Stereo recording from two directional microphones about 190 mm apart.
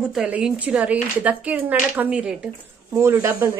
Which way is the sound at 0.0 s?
5° right (ahead or behind).